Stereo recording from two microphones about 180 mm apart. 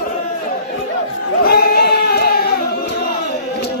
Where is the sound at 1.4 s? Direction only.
60° left (ahead or behind).